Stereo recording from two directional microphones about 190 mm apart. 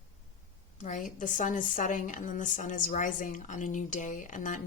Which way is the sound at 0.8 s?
45° left (ahead or behind).